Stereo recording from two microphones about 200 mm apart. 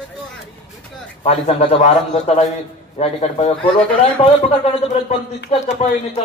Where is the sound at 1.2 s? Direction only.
30° left (ahead or behind).